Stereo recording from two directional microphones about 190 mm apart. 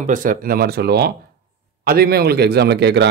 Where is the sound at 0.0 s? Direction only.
45° right (ahead or behind).